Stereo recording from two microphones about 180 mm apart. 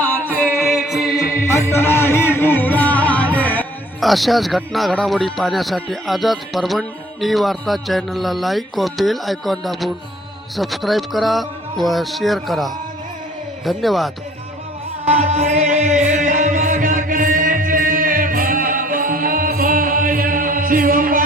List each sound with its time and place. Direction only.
0.3 s music: 10° left (ahead or behind)
10.6 s speech: centre (ahead or behind)
15.0 s music: 40° right (ahead or behind)